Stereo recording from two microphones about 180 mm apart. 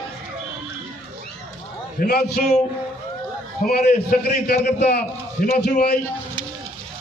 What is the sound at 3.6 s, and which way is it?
A man's voice, 60° left (ahead or behind).